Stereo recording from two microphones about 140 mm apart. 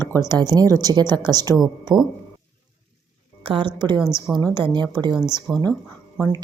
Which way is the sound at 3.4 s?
40° right (ahead or behind).